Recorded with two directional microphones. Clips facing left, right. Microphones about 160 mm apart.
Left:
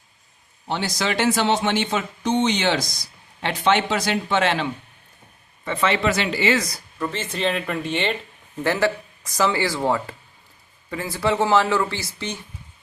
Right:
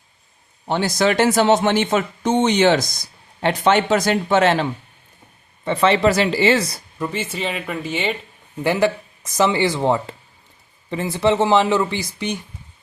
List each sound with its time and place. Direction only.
0.7 s speech: 50° right (ahead or behind); by 6.8 s 30° right (ahead or behind)
7.0 s speech: 10° right (ahead or behind)
8.6 s speech: 15° right (ahead or behind)